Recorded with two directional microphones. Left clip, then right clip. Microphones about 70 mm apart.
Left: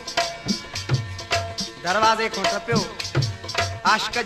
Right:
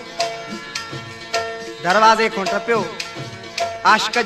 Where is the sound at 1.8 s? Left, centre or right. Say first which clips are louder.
Right 6 dB; left.